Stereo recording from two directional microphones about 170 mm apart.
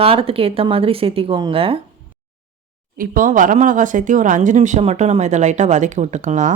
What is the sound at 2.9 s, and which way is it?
Speech, 55° right (ahead or behind).